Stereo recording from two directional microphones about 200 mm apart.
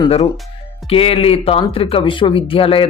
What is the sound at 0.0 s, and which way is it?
Speech, 30° left (ahead or behind).